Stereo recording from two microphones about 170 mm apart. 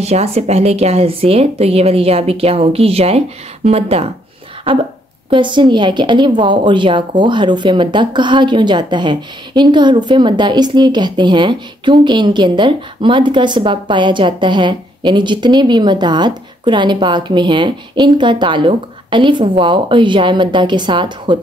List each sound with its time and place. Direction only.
0.0 s speech: 35° right (ahead or behind)
5.3 s a woman's voice: 30° right (ahead or behind)